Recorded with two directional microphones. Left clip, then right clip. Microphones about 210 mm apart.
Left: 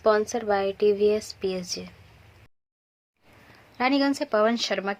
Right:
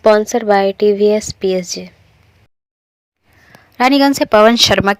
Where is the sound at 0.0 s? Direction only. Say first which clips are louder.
Right 11 dB; 30° right (ahead or behind).